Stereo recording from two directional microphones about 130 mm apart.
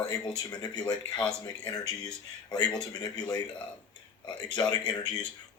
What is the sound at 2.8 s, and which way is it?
Speech, 30° left (ahead or behind).